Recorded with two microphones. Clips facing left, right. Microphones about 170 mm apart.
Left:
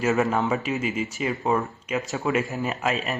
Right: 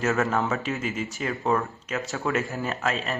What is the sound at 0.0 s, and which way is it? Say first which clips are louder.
Speech: left 2 dB; 10° left (ahead or behind).